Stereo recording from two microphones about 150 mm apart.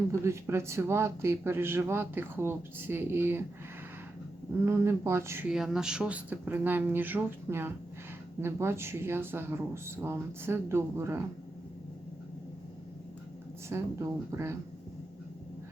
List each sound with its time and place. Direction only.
0.1 s speech: 20° right (ahead or behind)
4.6 s speech: 15° right (ahead or behind)
5.5 s speech: 5° right (ahead or behind)
13.7 s speech: 20° right (ahead or behind)